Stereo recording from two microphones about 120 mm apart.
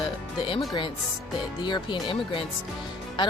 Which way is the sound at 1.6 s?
40° left (ahead or behind).